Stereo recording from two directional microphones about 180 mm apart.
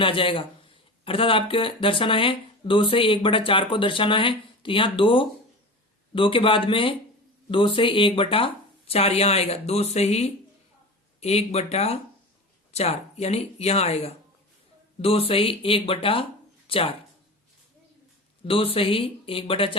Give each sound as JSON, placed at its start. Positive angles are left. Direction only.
{"t": 0.0, "sound": "speech", "side_deg": 30}
{"t": 18.4, "sound": "speech", "side_deg": 30}